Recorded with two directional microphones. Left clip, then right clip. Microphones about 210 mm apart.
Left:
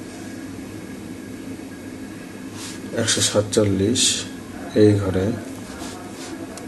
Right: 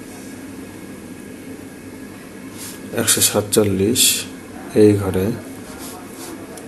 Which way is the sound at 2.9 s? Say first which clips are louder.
Right 1 dB; 30° right (ahead or behind).